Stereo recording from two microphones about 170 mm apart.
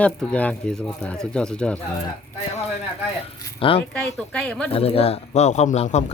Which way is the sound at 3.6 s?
30° left (ahead or behind).